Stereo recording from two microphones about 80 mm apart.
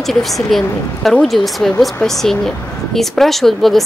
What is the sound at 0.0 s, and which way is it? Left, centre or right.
Speech, centre.